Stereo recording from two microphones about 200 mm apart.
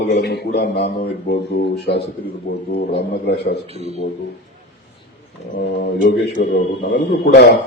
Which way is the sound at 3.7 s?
30° right (ahead or behind).